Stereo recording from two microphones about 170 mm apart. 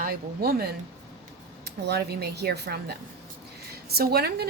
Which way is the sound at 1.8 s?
70° right (ahead or behind).